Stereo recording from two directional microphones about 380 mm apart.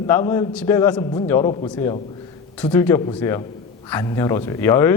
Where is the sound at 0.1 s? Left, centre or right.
Centre.